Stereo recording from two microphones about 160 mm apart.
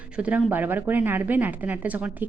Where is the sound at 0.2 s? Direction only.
10° right (ahead or behind).